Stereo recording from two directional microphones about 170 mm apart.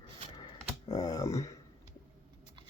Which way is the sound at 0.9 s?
20° left (ahead or behind).